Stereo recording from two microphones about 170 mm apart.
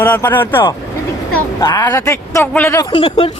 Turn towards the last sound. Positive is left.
turn(degrees=35)  # may be behind; listen again after turning